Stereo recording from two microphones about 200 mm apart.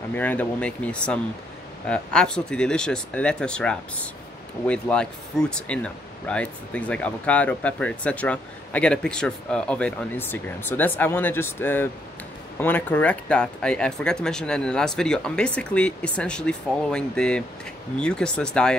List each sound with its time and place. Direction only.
0.1 s speech: 10° left (ahead or behind)